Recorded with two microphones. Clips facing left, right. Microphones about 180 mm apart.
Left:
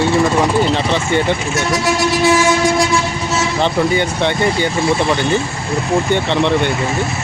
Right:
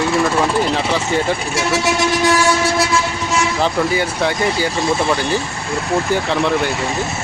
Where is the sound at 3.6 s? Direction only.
5° right (ahead or behind).